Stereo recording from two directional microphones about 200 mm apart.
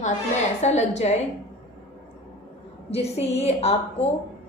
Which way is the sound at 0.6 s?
35° left (ahead or behind).